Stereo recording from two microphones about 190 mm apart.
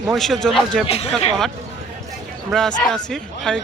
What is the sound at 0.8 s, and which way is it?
Speech, 30° left (ahead or behind).